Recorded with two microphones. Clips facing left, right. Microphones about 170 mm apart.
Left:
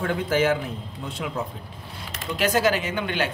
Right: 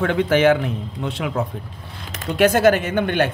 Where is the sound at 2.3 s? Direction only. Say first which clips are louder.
Right 7 dB; 60° right (ahead or behind).